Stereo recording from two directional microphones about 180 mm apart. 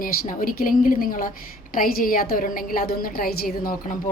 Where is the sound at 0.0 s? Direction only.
50° left (ahead or behind).